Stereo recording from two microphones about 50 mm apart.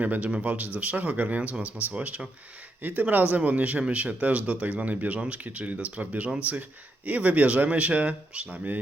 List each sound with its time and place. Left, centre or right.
0.0 s speech: right
2.8 s speech: right